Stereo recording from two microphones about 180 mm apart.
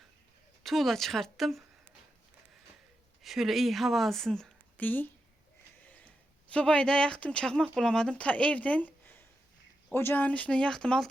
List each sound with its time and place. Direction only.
0.6 s speech: centre (ahead or behind)
3.2 s speech: centre (ahead or behind)
5.8 s a sound: 10° left (ahead or behind)
6.5 s speech: 5° left (ahead or behind)